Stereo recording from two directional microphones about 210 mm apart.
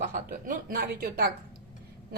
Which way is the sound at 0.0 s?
40° right (ahead or behind).